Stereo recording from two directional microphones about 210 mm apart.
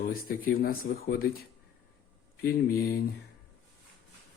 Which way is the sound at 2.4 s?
45° left (ahead or behind).